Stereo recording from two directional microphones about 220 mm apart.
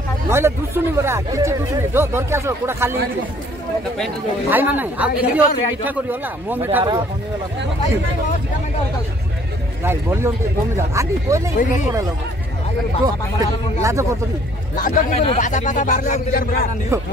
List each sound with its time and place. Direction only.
0.3 s a man's voice: 10° right (ahead or behind)
4.5 s a man's voice: 10° right (ahead or behind)
6.8 s speech: 20° right (ahead or behind)
9.8 s a man's voice: 10° right (ahead or behind)
14.8 s a man's voice: 35° left (ahead or behind)
16.9 s a man's voice: 10° right (ahead or behind)